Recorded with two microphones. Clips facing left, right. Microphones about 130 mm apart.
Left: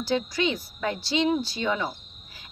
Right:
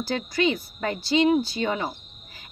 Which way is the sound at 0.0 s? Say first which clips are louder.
Right 1 dB; 55° right (ahead or behind).